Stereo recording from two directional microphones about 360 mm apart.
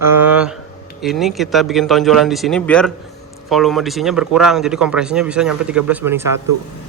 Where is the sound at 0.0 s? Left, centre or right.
Centre.